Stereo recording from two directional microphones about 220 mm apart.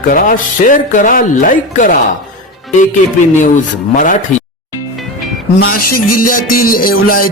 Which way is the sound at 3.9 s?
35° left (ahead or behind).